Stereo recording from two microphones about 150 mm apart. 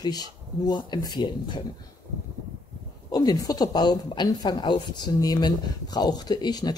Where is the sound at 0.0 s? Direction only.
25° left (ahead or behind).